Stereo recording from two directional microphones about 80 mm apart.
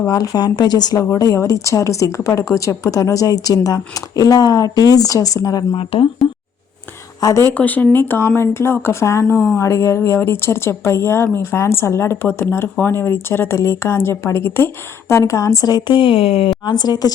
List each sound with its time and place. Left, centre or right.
0.1 s speech: left
6.2 s speech: centre
7.2 s speech: left
7.5 s speech: left
15.7 s speech: left